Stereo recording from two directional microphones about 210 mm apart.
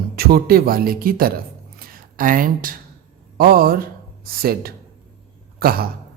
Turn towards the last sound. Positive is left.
turn(degrees=-45)  # may be behind; listen again after turning